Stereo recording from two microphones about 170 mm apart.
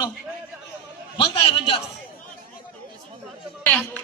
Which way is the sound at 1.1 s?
35° left (ahead or behind).